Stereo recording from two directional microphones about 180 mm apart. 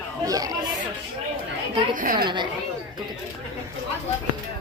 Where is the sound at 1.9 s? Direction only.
50° right (ahead or behind).